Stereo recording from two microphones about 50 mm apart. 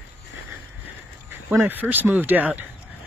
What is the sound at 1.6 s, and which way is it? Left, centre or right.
Speech, right.